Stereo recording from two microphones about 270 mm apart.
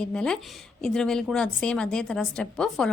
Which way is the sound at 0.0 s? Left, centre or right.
Centre.